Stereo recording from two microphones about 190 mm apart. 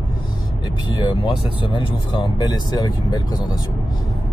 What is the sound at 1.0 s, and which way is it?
Speech, 25° left (ahead or behind).